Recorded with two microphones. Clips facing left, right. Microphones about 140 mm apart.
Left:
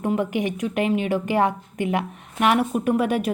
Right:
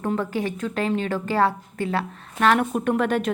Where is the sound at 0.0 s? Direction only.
15° left (ahead or behind).